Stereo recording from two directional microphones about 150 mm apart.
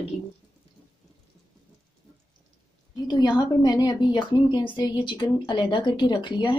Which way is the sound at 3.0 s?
25° left (ahead or behind).